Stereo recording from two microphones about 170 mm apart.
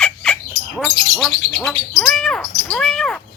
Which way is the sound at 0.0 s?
5° left (ahead or behind).